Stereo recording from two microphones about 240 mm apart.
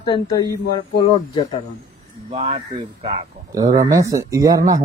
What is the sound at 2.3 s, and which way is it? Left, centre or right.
Speech, right.